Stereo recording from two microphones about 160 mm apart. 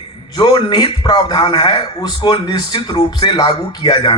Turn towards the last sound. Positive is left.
turn(degrees=25)  # may be behind; listen again after turning